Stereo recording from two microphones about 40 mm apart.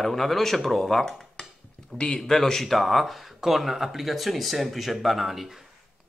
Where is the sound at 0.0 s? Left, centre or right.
Centre.